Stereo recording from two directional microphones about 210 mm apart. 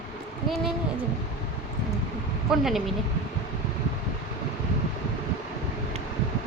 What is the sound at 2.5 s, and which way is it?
Speech, centre (ahead or behind).